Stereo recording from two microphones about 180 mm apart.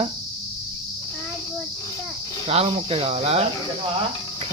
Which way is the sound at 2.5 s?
35° right (ahead or behind).